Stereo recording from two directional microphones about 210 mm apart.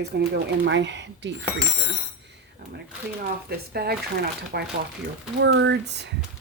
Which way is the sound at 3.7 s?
50° right (ahead or behind).